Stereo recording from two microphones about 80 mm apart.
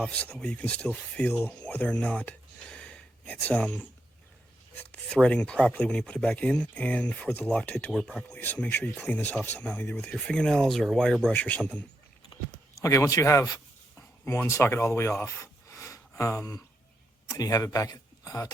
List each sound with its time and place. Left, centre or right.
0.0 s speech: centre
2.6 s a sound: centre
4.8 s speech: centre
7.9 s speech: centre
8.4 s speech: left
12.7 s a man's voice: left